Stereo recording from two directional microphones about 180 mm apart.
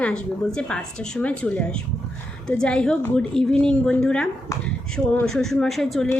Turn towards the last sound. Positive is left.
turn(degrees=0)  # may be behind; listen again after turning